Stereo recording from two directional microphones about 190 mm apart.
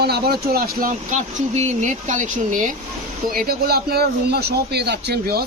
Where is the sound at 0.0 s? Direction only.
55° right (ahead or behind).